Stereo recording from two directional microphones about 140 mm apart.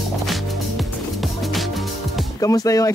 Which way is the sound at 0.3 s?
Centre (ahead or behind).